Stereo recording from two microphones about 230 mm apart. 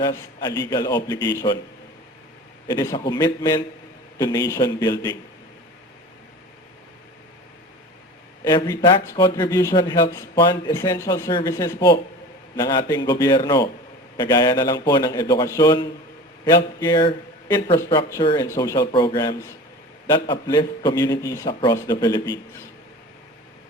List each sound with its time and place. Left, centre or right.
0.0 s speech: centre
2.6 s speech: centre
8.4 s speech: centre